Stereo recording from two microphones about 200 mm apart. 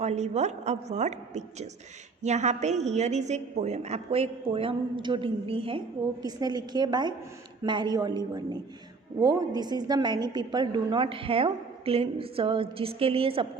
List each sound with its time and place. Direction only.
0.0 s a woman's voice: 35° right (ahead or behind)